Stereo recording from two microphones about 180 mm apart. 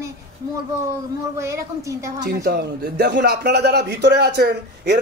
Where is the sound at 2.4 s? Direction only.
65° right (ahead or behind).